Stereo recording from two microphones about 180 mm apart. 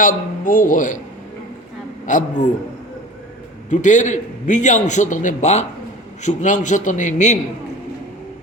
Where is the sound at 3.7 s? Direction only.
45° left (ahead or behind).